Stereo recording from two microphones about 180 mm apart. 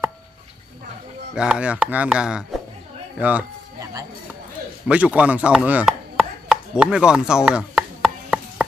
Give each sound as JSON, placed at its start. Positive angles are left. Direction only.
{"t": 1.3, "sound": "speech", "side_deg": -5}
{"t": 3.2, "sound": "a sound", "side_deg": -10}
{"t": 4.8, "sound": "chopping", "side_deg": -5}